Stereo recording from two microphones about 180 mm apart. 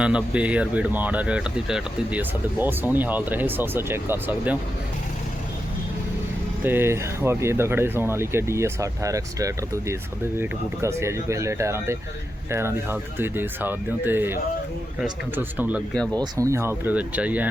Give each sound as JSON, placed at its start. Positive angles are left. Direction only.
{"t": 0.0, "sound": "speech", "side_deg": -5}
{"t": 6.7, "sound": "speech", "side_deg": -15}
{"t": 16.1, "sound": "speech", "side_deg": -20}